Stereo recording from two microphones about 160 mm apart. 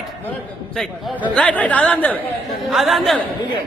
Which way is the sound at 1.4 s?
10° left (ahead or behind).